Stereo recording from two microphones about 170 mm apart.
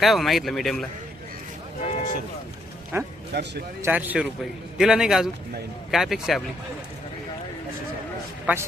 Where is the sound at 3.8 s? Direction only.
10° right (ahead or behind).